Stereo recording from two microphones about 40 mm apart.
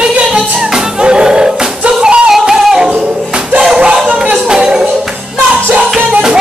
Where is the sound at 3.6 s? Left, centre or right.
Centre.